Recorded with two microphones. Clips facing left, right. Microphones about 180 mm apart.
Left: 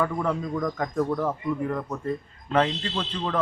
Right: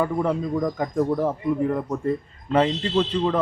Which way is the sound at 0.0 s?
20° right (ahead or behind).